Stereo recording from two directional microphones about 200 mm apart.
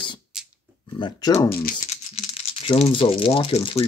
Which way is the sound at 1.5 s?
50° left (ahead or behind).